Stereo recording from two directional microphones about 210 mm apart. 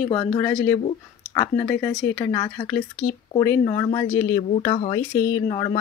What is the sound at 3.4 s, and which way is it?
Speech, 20° left (ahead or behind).